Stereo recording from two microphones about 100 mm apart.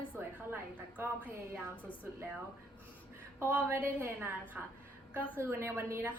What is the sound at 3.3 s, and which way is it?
Speech, 25° right (ahead or behind).